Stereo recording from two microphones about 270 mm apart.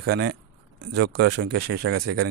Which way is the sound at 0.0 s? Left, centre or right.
Right.